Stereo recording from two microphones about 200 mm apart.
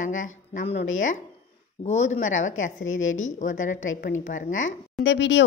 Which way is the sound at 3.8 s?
75° left (ahead or behind).